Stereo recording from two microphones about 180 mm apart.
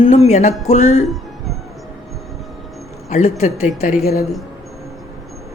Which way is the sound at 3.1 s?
40° left (ahead or behind).